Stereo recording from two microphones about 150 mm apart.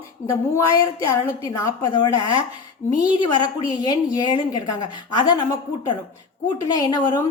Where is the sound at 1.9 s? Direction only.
30° left (ahead or behind).